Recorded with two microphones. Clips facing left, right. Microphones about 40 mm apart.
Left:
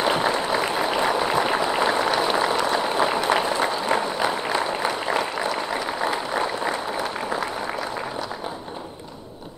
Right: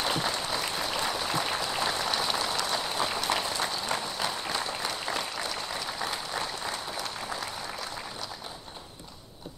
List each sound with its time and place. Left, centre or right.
0.0 s applause: left